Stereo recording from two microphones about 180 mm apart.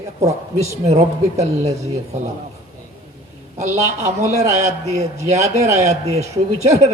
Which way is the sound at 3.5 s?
40° right (ahead or behind).